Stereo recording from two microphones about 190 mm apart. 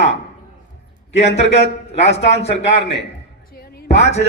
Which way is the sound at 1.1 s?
35° left (ahead or behind).